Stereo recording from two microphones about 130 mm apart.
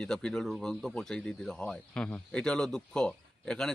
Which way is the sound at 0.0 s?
5° left (ahead or behind).